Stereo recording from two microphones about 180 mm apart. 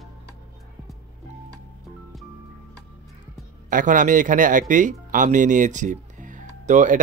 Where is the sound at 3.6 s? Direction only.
50° right (ahead or behind).